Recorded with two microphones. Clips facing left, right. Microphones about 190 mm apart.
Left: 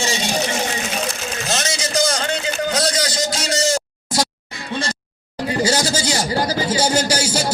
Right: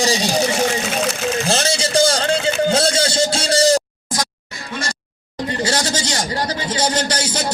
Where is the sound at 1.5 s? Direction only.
30° right (ahead or behind).